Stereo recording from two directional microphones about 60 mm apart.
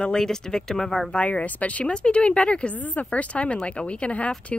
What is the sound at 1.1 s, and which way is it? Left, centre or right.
Speech, left.